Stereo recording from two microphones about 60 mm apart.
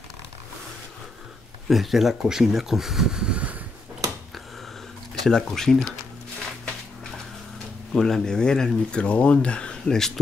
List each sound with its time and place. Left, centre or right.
1.7 s speech: centre; by 3.6 s right
5.2 s speech: centre
7.9 s speech: centre